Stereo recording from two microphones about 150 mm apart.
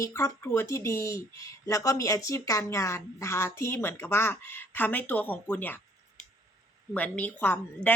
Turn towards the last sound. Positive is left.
turn(degrees=15)  # may be behind; listen again after turning